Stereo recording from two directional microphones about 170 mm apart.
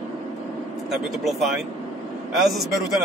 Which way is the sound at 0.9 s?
Centre (ahead or behind).